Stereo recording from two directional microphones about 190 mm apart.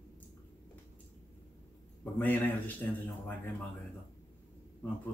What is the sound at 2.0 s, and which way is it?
Speech, 10° left (ahead or behind).